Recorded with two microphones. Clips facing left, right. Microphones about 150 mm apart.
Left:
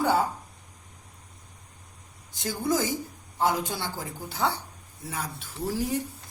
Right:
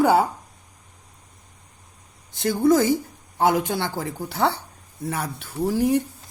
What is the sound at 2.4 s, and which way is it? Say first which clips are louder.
A man's voice: right 9 dB; 70° right (ahead or behind).